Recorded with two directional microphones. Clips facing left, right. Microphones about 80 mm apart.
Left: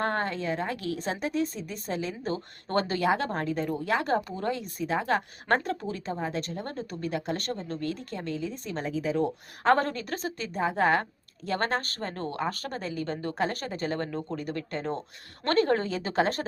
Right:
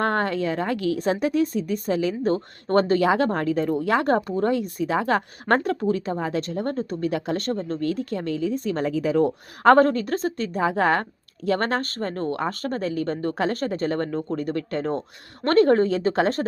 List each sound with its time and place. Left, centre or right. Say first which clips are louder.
0.0 s speech: right 6 dB; right
6.6 s speech: right 9 dB; right
10.6 s speech: right 3 dB; right